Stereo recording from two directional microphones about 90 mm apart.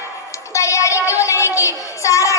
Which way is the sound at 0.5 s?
35° left (ahead or behind).